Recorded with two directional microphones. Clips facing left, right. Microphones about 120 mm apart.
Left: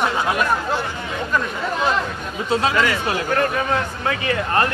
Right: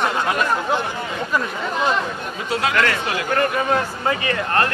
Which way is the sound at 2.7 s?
10° left (ahead or behind).